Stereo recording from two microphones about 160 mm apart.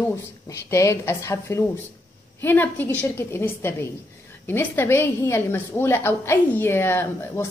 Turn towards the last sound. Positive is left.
turn(degrees=15)  # may be behind; listen again after turning